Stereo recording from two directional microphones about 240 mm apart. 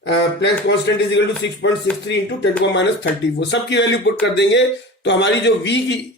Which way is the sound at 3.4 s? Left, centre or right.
Left.